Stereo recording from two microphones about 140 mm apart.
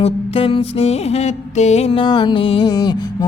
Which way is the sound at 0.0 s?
45° left (ahead or behind).